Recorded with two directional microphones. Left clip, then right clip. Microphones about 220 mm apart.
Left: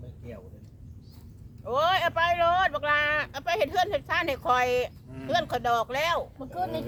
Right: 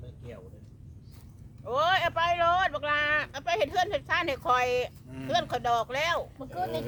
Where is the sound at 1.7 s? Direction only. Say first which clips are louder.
Left 1 dB; 10° left (ahead or behind).